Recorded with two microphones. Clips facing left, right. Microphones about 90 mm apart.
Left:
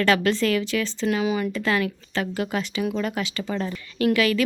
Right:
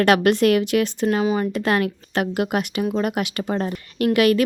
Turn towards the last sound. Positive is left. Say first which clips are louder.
# right 4 dB
turn(degrees=-60)  # may be behind; listen again after turning